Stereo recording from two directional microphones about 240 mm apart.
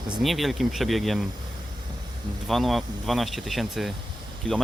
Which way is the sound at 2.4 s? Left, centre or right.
Centre.